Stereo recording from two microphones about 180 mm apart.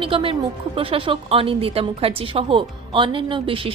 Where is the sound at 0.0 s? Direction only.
30° right (ahead or behind).